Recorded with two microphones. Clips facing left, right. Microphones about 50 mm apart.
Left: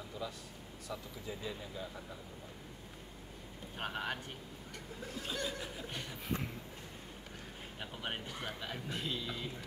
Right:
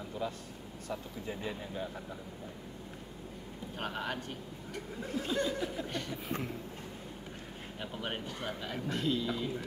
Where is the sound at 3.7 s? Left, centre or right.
Centre.